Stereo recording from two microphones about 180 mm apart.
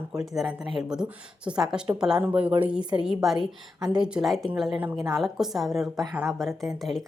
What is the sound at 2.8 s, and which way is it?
Speech, 25° right (ahead or behind).